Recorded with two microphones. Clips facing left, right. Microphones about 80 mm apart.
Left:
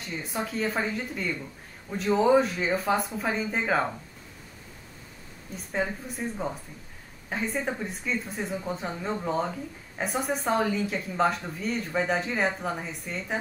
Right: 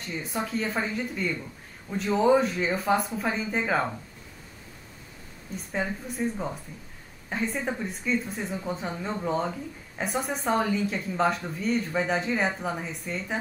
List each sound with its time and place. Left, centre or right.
0.0 s speech: centre
5.7 s speech: centre